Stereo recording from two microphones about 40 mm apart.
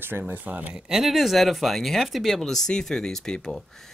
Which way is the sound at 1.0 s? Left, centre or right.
Centre.